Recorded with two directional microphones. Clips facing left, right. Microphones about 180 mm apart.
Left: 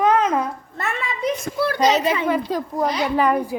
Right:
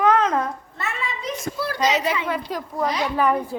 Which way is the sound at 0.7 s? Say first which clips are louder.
Left 3 dB; 55° left (ahead or behind).